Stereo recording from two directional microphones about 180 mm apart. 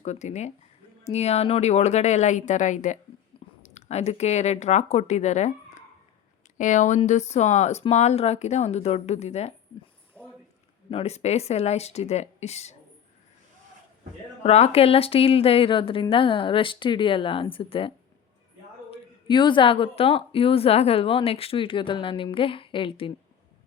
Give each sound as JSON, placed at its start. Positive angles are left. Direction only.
{"t": 0.0, "sound": "speech", "side_deg": 40}
{"t": 10.9, "sound": "speech", "side_deg": 35}
{"t": 14.4, "sound": "a woman's voice", "side_deg": 35}
{"t": 19.3, "sound": "a woman's voice", "side_deg": 25}